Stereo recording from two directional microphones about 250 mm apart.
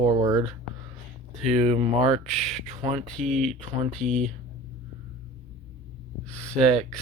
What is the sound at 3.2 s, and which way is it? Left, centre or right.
Speech, right.